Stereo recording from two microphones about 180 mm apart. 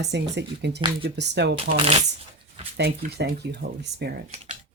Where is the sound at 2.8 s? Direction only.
65° right (ahead or behind).